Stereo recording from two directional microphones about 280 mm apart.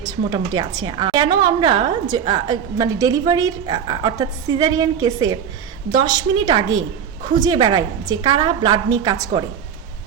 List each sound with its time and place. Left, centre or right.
0.0 s a woman's voice: centre